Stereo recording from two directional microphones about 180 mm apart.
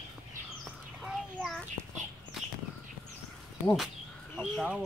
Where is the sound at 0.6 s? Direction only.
Centre (ahead or behind).